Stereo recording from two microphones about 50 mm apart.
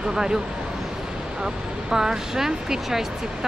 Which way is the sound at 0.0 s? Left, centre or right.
Centre.